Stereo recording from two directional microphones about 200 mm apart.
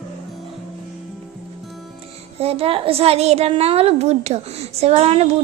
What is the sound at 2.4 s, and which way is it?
A child's voice, 30° right (ahead or behind).